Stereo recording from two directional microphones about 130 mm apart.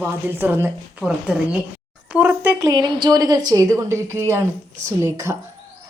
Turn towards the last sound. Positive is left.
turn(degrees=-25)  # may be behind; listen again after turning